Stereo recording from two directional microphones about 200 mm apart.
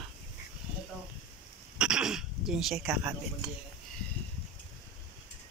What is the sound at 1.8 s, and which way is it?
Speech, 5° right (ahead or behind).